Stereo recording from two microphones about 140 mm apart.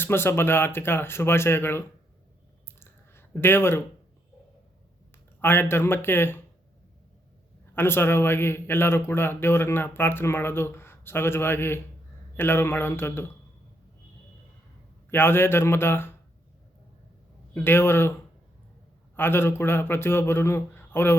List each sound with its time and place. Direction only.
0.0 s a man's voice: 15° left (ahead or behind)
2.8 s a sound: 15° left (ahead or behind)
5.4 s a man's voice: 15° left (ahead or behind)
7.7 s a man's voice: 15° left (ahead or behind)
15.1 s a man's voice: 15° left (ahead or behind)
17.5 s a man's voice: 15° left (ahead or behind)
19.1 s a man's voice: 15° left (ahead or behind)